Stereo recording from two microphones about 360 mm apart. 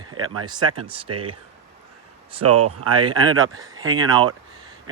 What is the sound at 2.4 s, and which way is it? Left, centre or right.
Speech, right.